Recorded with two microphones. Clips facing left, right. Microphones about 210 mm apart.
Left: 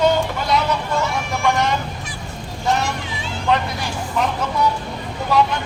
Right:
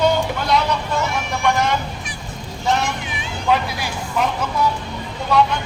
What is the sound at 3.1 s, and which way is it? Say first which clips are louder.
Vehicle: left 1 dB; 20° right (ahead or behind).